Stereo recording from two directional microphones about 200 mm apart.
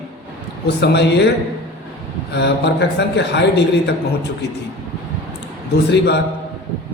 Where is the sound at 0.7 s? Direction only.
55° left (ahead or behind).